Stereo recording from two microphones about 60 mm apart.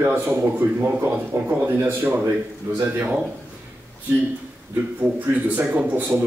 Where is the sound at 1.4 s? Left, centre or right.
Right.